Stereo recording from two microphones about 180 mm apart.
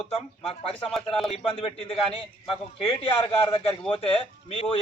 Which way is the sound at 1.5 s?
30° left (ahead or behind).